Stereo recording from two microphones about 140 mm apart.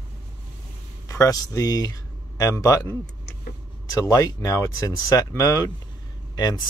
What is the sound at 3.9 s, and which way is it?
Speech, 25° left (ahead or behind).